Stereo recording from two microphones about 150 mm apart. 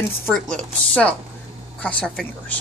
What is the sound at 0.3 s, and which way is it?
Speech, 5° left (ahead or behind).